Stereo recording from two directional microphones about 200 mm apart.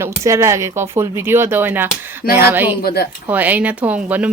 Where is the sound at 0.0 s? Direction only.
15° right (ahead or behind).